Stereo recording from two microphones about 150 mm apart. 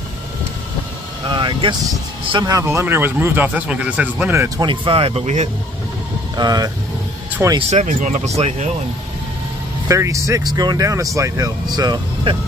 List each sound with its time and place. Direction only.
1.3 s vehicle: 30° right (ahead or behind)
2.3 s speech: 25° right (ahead or behind)
4.6 s speech: 35° right (ahead or behind)
6.3 s speech: 25° right (ahead or behind)
7.4 s speech: 15° right (ahead or behind)
7.7 s speech: 55° right (ahead or behind)
9.8 s speech: 20° right (ahead or behind)